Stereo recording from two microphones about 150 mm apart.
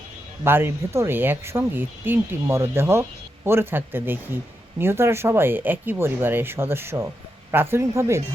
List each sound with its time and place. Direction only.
0.4 s speech: 15° right (ahead or behind)